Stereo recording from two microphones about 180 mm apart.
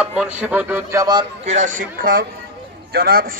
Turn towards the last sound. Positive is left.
turn(degrees=-55)  # may be behind; listen again after turning